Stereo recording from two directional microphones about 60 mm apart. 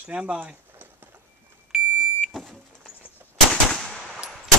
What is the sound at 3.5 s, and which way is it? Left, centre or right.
Gunshot, centre.